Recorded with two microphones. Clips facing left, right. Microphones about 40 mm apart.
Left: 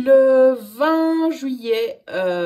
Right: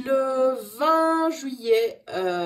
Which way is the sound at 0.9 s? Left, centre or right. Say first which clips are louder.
Left 2 dB; left.